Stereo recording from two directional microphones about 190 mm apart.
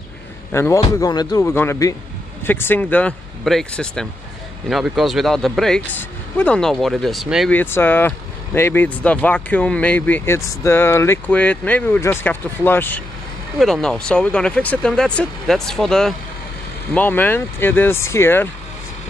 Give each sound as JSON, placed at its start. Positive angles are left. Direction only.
{"t": 0.5, "sound": "speech", "side_deg": 15}
{"t": 7.5, "sound": "speech", "side_deg": 10}